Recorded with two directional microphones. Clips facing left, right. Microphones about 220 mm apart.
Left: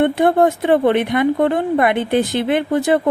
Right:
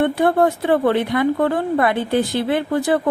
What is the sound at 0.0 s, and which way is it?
Speech, 20° left (ahead or behind).